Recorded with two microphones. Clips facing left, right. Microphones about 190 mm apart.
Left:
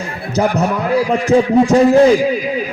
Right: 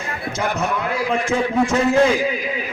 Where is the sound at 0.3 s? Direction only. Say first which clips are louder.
Left 8 dB; 35° left (ahead or behind).